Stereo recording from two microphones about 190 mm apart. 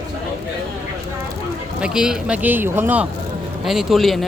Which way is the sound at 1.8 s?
5° right (ahead or behind).